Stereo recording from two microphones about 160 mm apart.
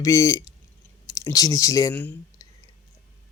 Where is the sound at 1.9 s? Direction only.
10° left (ahead or behind).